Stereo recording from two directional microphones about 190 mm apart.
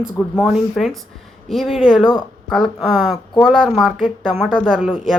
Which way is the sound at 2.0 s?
20° left (ahead or behind).